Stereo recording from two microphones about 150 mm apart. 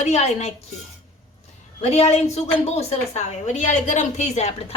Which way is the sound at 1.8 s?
45° left (ahead or behind).